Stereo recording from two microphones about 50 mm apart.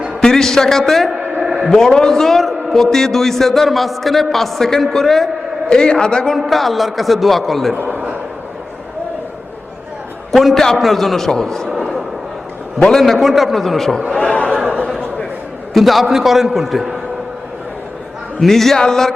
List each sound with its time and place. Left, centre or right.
0.2 s a man's voice: centre
6.5 s a man's voice: centre
10.3 s a man's voice: centre
12.8 s a man's voice: centre
14.1 s a sound: left
14.8 s a sound: centre
15.7 s a man's voice: centre
18.3 s a man's voice: centre